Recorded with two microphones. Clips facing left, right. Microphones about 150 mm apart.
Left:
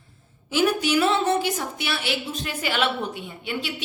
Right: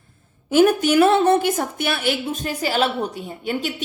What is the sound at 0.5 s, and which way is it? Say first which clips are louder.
A woman's voice: right 6 dB; 50° right (ahead or behind).